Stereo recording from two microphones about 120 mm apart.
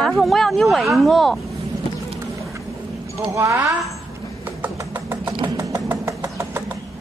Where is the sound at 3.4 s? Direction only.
25° right (ahead or behind).